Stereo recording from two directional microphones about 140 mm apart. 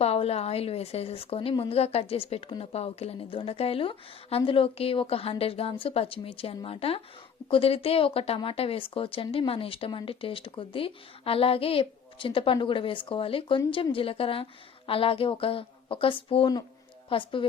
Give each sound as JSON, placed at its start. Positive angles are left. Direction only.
{"t": 0.0, "sound": "a woman's voice", "side_deg": 45}